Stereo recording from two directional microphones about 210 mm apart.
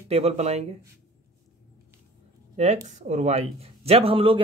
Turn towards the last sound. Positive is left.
turn(degrees=-25)  # may be behind; listen again after turning